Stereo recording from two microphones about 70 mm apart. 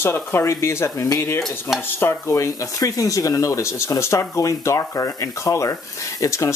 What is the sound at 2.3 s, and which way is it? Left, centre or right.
Speech, left.